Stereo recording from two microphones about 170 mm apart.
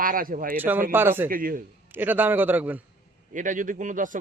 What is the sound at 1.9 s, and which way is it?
Speech, 10° right (ahead or behind).